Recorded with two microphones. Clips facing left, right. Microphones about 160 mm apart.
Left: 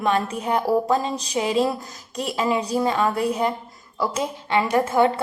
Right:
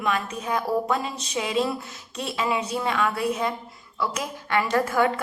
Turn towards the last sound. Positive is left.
turn(degrees=25)  # may be behind; listen again after turning